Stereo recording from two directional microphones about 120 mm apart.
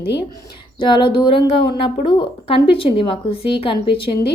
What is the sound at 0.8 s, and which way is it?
A woman's voice, 45° left (ahead or behind).